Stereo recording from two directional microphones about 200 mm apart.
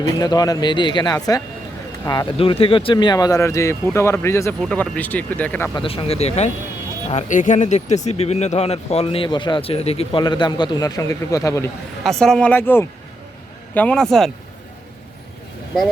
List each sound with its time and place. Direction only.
0.2 s speech: 20° left (ahead or behind)
5.7 s speech: 25° left (ahead or behind)
12.0 s speech: 5° left (ahead or behind)